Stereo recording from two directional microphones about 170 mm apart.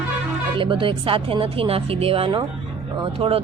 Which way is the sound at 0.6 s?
30° right (ahead or behind).